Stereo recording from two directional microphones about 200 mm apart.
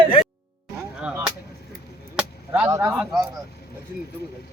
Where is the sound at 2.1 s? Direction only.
5° right (ahead or behind).